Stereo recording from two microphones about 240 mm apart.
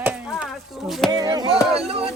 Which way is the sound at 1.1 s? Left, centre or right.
Centre.